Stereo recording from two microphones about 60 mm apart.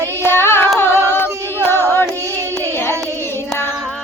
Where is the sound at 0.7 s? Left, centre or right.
Left.